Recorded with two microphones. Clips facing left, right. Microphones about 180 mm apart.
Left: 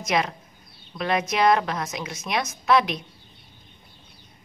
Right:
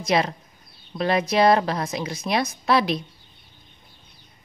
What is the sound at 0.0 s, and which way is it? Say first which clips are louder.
A woman's voice: right 3 dB; 35° right (ahead or behind).